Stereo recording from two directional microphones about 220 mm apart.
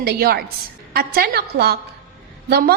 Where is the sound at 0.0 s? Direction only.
45° right (ahead or behind).